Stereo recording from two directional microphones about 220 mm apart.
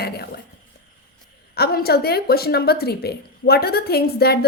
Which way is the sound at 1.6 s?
45° left (ahead or behind).